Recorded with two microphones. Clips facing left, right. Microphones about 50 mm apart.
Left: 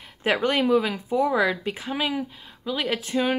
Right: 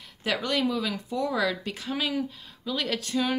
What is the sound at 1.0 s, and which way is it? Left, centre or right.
Speech, centre.